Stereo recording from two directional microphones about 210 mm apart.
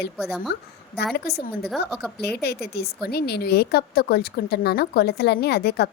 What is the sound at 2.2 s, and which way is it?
A woman's voice, 50° left (ahead or behind).